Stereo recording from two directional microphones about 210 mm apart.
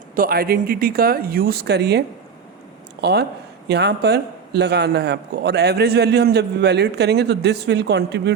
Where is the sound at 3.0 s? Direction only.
50° right (ahead or behind).